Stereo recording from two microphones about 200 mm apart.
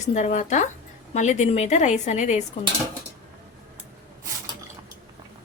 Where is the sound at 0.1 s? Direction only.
35° left (ahead or behind).